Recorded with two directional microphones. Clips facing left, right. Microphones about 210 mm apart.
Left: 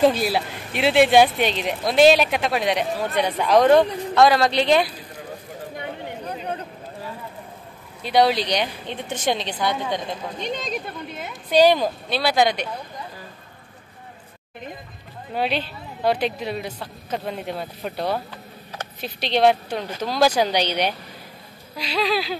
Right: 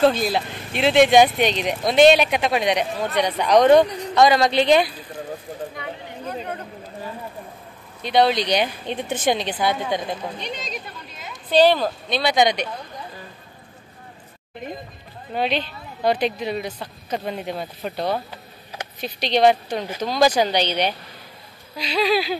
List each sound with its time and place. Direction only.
0.0 s speech: 10° left (ahead or behind)
8.0 s speech: 10° left (ahead or behind)
9.2 s speech: 5° right (ahead or behind)
10.4 s a woman's voice: 50° left (ahead or behind)
11.5 s speech: 10° left (ahead or behind)
15.3 s speech: 5° left (ahead or behind)
22.0 s speech: 10° right (ahead or behind)